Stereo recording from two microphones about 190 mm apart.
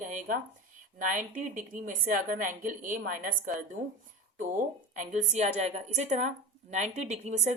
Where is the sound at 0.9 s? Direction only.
40° right (ahead or behind).